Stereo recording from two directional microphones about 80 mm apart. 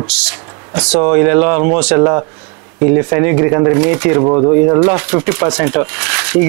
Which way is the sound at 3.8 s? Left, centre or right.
Centre.